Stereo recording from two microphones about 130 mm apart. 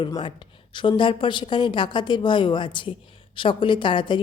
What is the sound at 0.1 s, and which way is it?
A woman's voice, 35° left (ahead or behind).